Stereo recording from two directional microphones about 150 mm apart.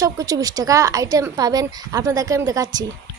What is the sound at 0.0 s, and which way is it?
Speech, 25° right (ahead or behind).